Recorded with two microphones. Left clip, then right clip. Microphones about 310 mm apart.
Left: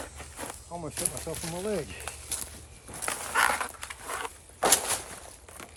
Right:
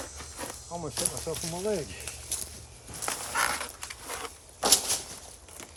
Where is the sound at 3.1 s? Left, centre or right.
Centre.